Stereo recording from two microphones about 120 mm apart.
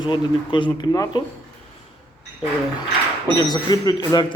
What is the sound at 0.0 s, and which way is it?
Speech, 40° left (ahead or behind).